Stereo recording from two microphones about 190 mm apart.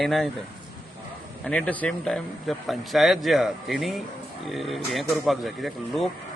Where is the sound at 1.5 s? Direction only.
5° left (ahead or behind).